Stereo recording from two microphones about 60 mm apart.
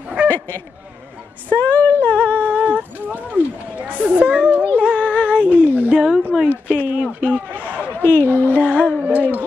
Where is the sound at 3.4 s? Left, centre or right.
Right.